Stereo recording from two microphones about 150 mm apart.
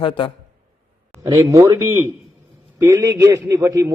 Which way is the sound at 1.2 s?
20° right (ahead or behind).